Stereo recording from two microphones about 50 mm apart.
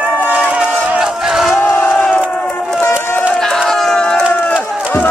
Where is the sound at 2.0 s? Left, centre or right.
Left.